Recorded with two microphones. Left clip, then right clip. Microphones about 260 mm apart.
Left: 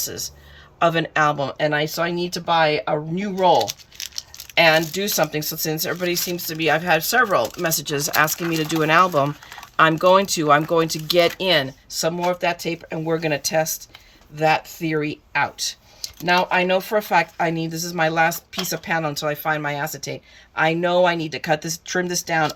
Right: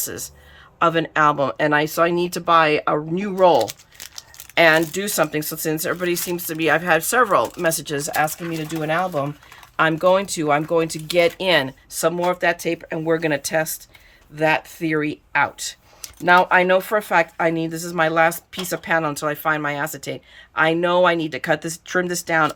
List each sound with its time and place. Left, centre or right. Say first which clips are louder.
0.0 s speech: left 2 dB; centre